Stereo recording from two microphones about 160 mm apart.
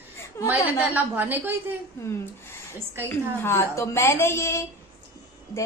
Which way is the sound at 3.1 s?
15° left (ahead or behind).